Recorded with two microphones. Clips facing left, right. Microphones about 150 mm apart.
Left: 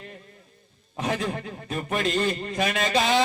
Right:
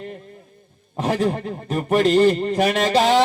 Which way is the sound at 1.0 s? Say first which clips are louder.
Right 7 dB; 35° right (ahead or behind).